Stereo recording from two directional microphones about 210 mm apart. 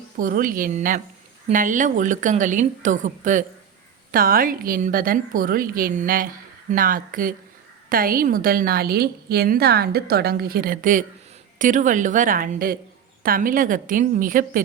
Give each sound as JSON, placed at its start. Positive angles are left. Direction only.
{"t": 0.2, "sound": "a woman's voice", "side_deg": -40}